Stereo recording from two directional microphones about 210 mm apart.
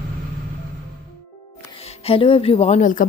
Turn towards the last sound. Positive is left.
turn(degrees=40)  # may be behind; listen again after turning